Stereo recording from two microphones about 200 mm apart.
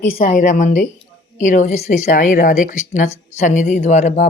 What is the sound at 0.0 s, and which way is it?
Speech, 40° left (ahead or behind).